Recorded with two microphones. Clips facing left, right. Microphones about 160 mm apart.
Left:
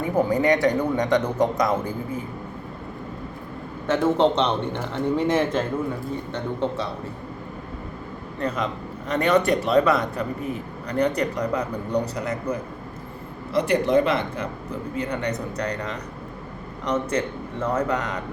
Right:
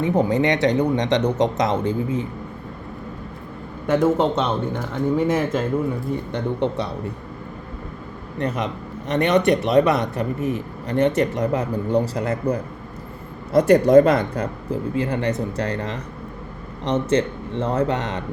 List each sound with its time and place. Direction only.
0.0 s speech: 20° right (ahead or behind)
3.8 s speech: 5° right (ahead or behind)
8.4 s speech: 20° right (ahead or behind)
13.5 s speech: 45° right (ahead or behind); by 18.2 s 25° right (ahead or behind)